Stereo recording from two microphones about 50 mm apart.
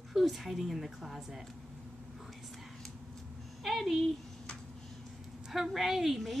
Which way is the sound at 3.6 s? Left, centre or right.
Centre.